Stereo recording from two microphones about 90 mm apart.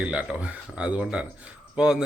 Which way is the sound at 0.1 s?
15° right (ahead or behind).